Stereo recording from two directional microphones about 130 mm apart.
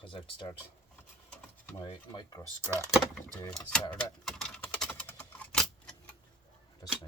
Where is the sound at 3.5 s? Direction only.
10° left (ahead or behind).